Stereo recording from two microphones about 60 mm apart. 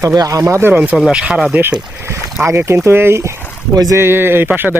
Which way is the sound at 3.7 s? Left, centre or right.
Right.